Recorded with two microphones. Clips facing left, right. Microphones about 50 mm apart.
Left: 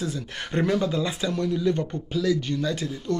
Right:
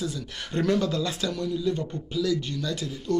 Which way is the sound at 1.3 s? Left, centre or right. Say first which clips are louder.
Left 3 dB; left.